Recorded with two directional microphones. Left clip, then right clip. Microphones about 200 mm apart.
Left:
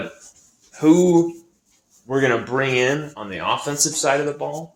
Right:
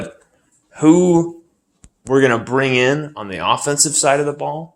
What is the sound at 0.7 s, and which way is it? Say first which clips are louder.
Speech: right 2 dB; 50° right (ahead or behind).